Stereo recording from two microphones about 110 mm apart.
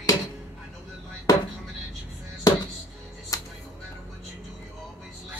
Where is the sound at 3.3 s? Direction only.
35° left (ahead or behind).